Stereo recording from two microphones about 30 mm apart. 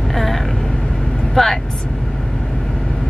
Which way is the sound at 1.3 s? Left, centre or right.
Centre.